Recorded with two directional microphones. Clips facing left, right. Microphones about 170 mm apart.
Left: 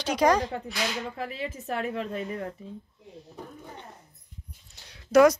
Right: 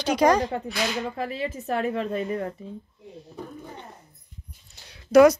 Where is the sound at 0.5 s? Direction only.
65° right (ahead or behind).